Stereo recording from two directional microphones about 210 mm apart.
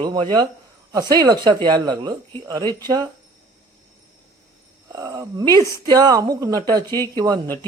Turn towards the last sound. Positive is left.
turn(degrees=-15)  # may be behind; listen again after turning